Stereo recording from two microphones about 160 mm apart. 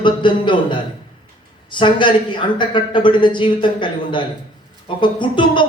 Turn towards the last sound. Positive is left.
turn(degrees=30)  # may be behind; listen again after turning